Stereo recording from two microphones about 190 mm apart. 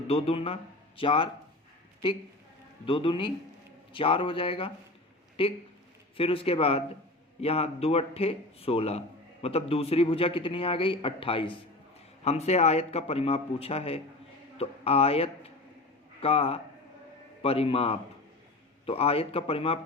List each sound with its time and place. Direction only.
0.1 s speech: 30° left (ahead or behind)
2.8 s a man's voice: 25° left (ahead or behind)